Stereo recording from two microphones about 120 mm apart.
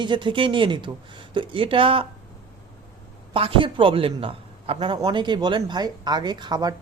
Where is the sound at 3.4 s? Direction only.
50° right (ahead or behind).